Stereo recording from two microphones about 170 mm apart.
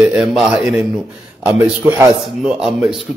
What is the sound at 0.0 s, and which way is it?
Speech, centre (ahead or behind).